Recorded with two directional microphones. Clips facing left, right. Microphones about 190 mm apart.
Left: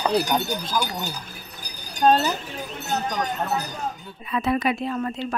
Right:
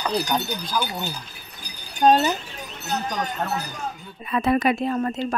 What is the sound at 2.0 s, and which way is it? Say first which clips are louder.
Speech: right 1 dB; 10° right (ahead or behind).